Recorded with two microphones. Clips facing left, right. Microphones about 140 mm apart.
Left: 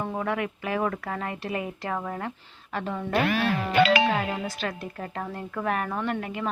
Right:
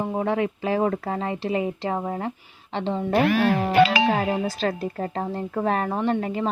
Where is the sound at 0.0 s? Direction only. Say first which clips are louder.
Right 5 dB; 25° right (ahead or behind).